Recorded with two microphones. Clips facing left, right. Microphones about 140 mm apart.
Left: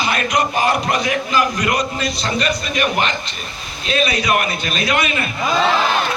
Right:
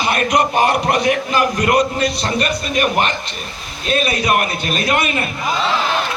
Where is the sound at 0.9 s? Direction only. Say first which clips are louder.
Right 2 dB; 55° right (ahead or behind).